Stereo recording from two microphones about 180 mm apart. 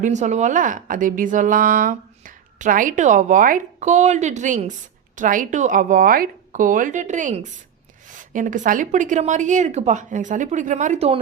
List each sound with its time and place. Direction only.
0.0 s a woman's voice: 40° right (ahead or behind)